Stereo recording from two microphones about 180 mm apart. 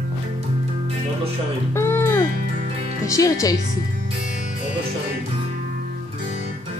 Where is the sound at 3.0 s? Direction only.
20° left (ahead or behind).